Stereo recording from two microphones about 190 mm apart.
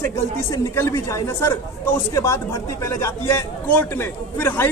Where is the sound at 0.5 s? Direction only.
15° left (ahead or behind).